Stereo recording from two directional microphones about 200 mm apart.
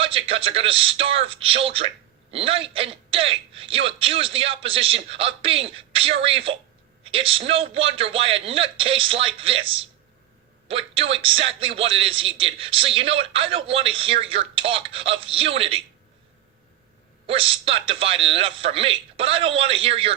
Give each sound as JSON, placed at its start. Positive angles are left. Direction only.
{"t": 0.0, "sound": "a man's voice", "side_deg": -30}
{"t": 17.2, "sound": "a man's voice", "side_deg": -25}